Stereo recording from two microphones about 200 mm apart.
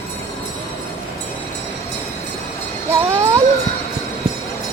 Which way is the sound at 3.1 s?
15° right (ahead or behind).